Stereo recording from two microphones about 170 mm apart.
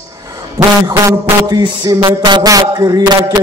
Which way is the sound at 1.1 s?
20° right (ahead or behind).